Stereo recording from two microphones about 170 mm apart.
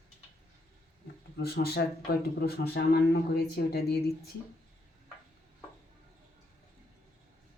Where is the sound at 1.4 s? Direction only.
65° left (ahead or behind).